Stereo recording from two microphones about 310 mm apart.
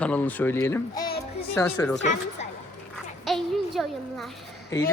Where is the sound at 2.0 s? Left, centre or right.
Left.